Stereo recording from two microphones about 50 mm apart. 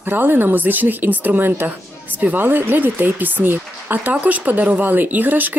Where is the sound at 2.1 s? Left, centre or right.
Right.